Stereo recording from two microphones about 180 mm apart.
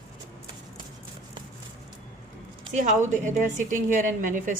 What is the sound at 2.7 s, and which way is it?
A woman's voice, 45° right (ahead or behind).